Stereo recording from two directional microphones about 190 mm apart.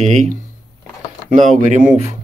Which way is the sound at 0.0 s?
35° right (ahead or behind).